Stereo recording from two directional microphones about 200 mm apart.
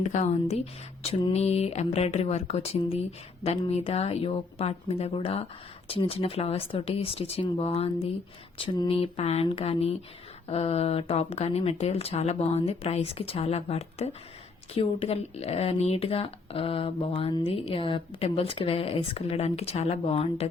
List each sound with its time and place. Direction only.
0.0 s speech: 35° left (ahead or behind)